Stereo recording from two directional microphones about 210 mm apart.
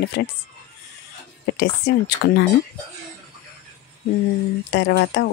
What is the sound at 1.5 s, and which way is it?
Speech, 50° left (ahead or behind).